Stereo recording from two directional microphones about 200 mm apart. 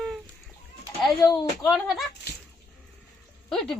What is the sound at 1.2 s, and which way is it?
Speech, 20° left (ahead or behind).